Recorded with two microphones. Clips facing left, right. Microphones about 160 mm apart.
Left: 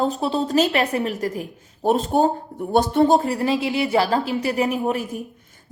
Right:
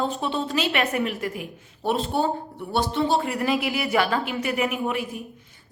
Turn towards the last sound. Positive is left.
turn(degrees=40)  # may be behind; listen again after turning